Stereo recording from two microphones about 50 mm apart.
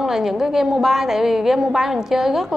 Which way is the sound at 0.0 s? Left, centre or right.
Centre.